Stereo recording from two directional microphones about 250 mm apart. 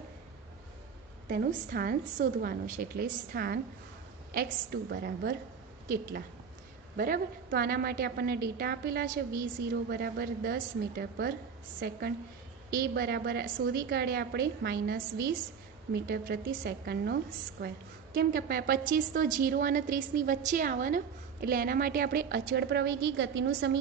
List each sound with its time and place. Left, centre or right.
1.3 s a woman's voice: right
12.7 s a woman's voice: right